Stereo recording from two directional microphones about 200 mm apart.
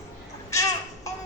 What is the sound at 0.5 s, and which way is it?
Babbling, 15° left (ahead or behind).